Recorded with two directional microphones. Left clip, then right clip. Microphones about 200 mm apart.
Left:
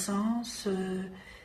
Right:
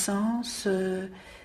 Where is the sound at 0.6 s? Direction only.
40° right (ahead or behind).